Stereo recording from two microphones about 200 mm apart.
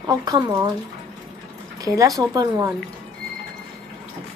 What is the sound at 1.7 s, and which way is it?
Speech, 15° right (ahead or behind).